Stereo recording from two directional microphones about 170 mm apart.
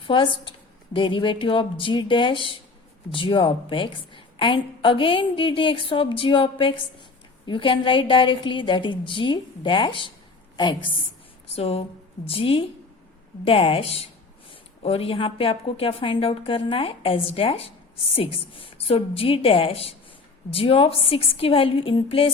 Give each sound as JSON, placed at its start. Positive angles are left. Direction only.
{"t": 0.0, "sound": "a woman's voice", "side_deg": 30}